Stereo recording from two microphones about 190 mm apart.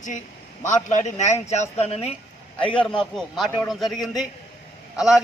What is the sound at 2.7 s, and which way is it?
A man's voice, 5° left (ahead or behind).